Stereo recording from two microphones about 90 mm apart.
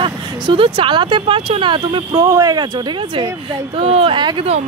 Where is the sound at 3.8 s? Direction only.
90° right; by 4.4 s 65° right (ahead or behind).